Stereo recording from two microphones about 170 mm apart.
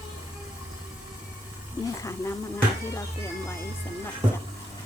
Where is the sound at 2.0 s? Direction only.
15° left (ahead or behind).